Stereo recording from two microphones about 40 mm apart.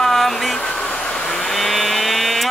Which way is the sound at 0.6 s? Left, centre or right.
Left.